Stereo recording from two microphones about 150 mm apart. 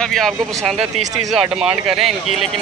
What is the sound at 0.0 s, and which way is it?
Speech, centre (ahead or behind).